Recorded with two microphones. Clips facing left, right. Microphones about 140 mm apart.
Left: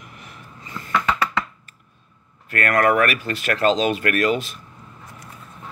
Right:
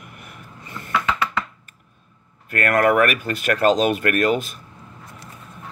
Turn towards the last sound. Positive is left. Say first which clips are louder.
# right 1 dB
turn(degrees=-50)  # may be behind; listen again after turning